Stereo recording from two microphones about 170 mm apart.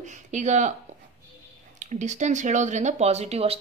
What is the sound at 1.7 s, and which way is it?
Speech, 45° right (ahead or behind).